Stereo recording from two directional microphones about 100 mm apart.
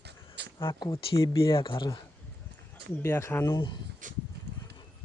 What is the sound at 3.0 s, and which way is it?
Speech, 30° left (ahead or behind).